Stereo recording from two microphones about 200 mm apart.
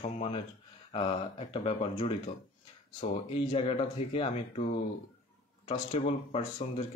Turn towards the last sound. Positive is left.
turn(degrees=30)  # may be behind; listen again after turning